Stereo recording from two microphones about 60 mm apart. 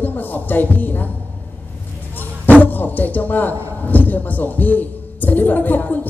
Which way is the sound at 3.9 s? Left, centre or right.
Left.